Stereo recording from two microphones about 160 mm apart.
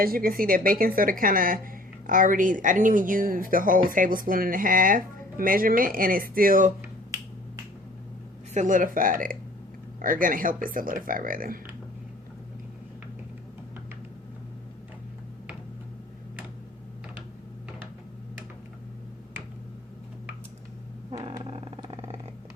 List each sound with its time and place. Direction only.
0.0 s speech: 65° right (ahead or behind)
8.5 s speech: 55° right (ahead or behind)
21.4 s vehicle: 35° right (ahead or behind)